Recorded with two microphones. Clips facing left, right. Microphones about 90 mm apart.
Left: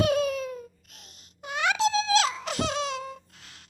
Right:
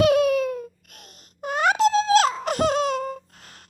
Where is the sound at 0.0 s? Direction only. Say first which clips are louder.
Right 7 dB; 65° right (ahead or behind).